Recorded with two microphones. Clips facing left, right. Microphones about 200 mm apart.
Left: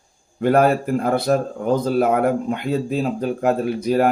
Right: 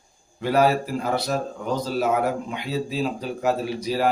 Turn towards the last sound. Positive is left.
turn(degrees=55)  # may be behind; listen again after turning